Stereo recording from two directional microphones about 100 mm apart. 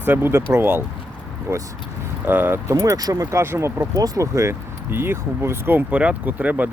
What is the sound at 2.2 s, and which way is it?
Speech, 20° right (ahead or behind).